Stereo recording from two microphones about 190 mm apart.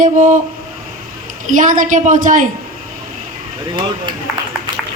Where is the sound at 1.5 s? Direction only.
45° right (ahead or behind).